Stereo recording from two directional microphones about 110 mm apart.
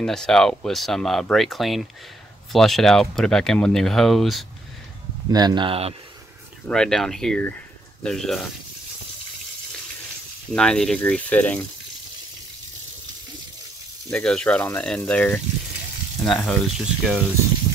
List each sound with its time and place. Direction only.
0.0 s speech: 5° left (ahead or behind)
5.3 s speech: 40° right (ahead or behind)
6.7 s speech: 5° left (ahead or behind)
10.5 s speech: 5° left (ahead or behind)
14.1 s speech: 10° left (ahead or behind)